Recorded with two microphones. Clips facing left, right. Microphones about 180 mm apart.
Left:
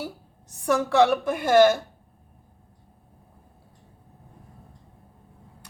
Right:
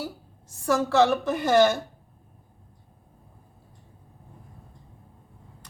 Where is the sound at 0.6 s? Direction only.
15° left (ahead or behind).